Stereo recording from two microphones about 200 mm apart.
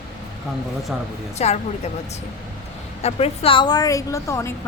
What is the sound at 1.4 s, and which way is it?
Speech, 35° left (ahead or behind).